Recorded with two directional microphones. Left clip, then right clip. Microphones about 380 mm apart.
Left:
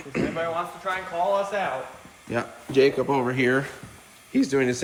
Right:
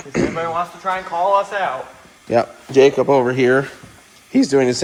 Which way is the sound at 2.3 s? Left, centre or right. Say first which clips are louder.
Right 9 dB; centre.